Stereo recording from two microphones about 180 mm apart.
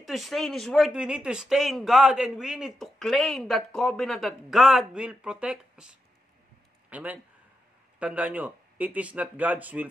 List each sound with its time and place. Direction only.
0.0 s speech: centre (ahead or behind)